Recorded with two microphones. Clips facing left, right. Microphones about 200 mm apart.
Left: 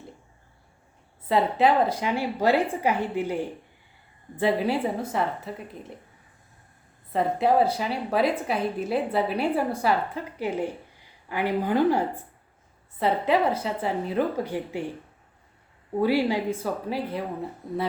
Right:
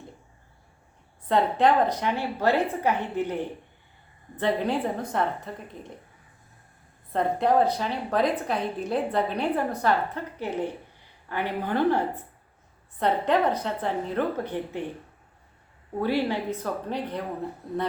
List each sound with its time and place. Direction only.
1.3 s a woman's voice: 5° left (ahead or behind)
7.1 s a woman's voice: 5° left (ahead or behind)
16.0 s a woman's voice: 10° left (ahead or behind)